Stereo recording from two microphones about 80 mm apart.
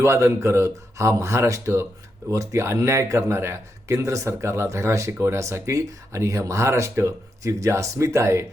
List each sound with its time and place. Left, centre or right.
0.0 s speech: right